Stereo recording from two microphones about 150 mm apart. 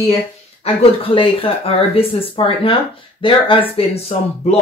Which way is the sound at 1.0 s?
35° left (ahead or behind).